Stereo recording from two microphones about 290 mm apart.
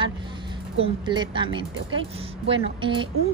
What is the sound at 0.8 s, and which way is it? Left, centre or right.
Speech, centre.